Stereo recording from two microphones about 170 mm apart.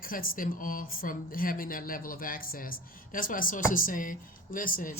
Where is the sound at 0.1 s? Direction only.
55° left (ahead or behind).